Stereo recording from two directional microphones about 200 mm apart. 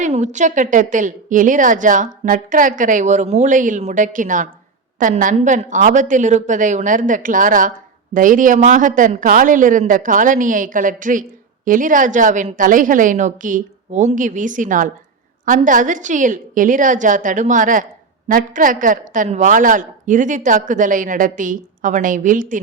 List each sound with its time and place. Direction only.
0.0 s a man's voice: 35° right (ahead or behind)